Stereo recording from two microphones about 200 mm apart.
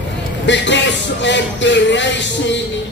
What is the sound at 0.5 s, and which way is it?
Speech, 60° left (ahead or behind).